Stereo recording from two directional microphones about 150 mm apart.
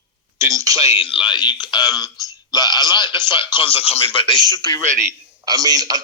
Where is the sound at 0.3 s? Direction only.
20° right (ahead or behind).